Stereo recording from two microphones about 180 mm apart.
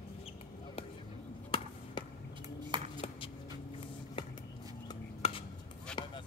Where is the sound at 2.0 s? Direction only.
25° left (ahead or behind).